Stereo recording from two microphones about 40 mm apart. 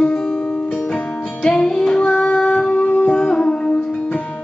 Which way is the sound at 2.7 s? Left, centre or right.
Left.